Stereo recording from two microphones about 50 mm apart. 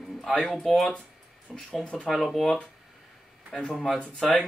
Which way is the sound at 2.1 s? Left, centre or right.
Centre.